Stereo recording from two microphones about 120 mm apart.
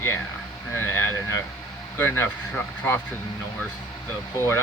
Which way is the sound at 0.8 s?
20° left (ahead or behind).